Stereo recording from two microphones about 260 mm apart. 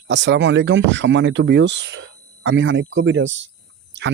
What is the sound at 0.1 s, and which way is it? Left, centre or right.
Speech, right.